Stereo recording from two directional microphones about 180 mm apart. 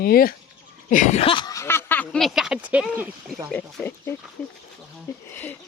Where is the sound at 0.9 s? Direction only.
45° left (ahead or behind); by 2.8 s 5° right (ahead or behind).